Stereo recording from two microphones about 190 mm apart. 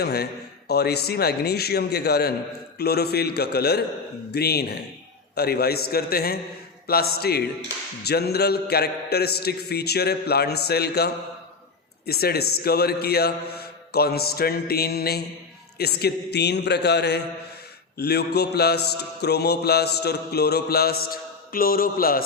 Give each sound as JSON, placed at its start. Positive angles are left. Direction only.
{"t": 0.0, "sound": "mantra", "side_deg": 55}